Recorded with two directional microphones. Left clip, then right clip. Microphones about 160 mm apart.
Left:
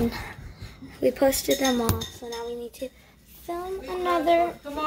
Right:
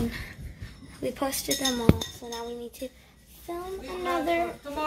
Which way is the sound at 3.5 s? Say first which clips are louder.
Left 4 dB; 20° left (ahead or behind).